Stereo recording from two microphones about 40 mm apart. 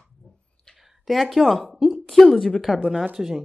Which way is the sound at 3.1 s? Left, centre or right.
Centre.